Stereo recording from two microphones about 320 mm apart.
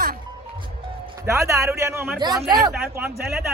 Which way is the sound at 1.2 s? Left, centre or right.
Centre.